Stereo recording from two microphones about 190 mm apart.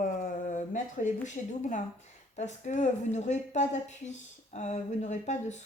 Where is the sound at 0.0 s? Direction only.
45° left (ahead or behind).